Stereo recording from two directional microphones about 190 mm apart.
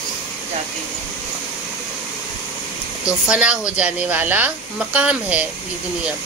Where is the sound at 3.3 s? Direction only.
5° right (ahead or behind).